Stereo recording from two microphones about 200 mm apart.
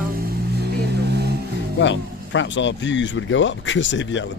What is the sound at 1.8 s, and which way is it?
Speech, 65° left (ahead or behind).